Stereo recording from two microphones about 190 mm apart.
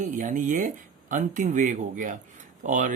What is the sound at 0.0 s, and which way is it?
Speech, 40° right (ahead or behind).